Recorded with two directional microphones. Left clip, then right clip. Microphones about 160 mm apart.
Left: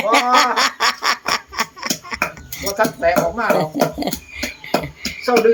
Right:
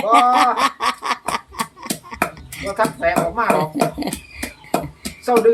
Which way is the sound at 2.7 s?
15° right (ahead or behind).